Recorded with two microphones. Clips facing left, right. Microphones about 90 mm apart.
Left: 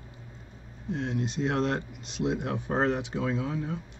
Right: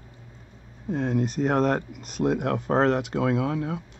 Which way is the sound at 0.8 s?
45° right (ahead or behind).